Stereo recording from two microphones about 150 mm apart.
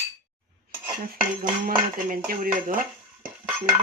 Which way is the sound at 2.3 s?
65° right (ahead or behind).